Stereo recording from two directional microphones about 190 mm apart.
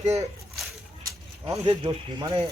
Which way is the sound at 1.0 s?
15° right (ahead or behind).